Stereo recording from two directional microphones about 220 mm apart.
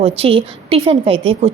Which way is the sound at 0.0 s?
25° right (ahead or behind).